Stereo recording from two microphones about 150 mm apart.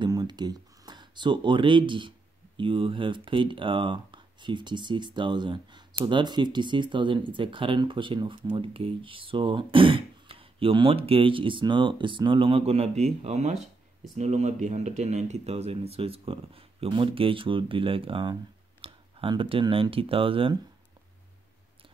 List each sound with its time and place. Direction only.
0.0 s speech: 30° right (ahead or behind)